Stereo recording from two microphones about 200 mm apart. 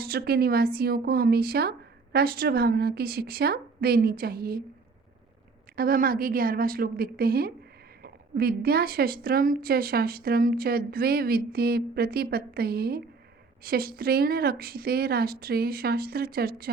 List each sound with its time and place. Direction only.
0.0 s speech: 50° right (ahead or behind)
5.7 s speech: 50° right (ahead or behind)